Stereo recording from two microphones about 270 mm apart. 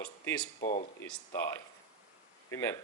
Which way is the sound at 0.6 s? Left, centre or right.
Left.